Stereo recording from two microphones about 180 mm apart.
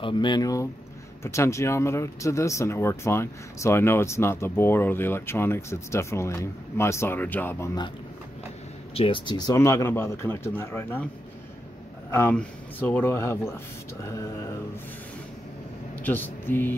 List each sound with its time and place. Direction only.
0.0 s speech: 25° left (ahead or behind)
8.9 s speech: 30° left (ahead or behind); by 11.1 s 10° left (ahead or behind)
12.1 s speech: 10° left (ahead or behind)
16.0 s speech: 10° left (ahead or behind)